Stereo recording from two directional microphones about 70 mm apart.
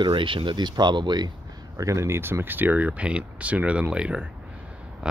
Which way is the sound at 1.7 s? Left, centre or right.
Right.